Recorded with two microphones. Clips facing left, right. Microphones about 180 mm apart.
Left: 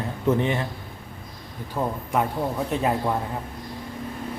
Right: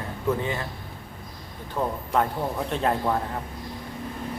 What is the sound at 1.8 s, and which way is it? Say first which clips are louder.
Speech: even; 10° left (ahead or behind).